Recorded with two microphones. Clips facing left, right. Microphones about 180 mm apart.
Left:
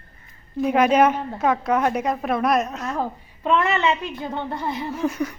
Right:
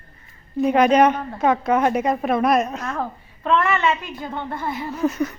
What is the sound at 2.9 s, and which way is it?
A woman's voice, 15° left (ahead or behind).